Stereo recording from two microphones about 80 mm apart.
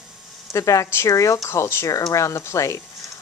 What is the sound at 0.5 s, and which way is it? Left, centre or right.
A woman's voice, left.